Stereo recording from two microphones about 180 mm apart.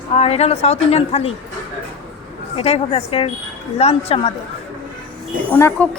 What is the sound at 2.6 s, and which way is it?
A woman's voice, 35° left (ahead or behind).